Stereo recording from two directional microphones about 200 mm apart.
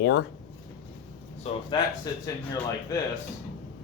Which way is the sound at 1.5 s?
35° left (ahead or behind).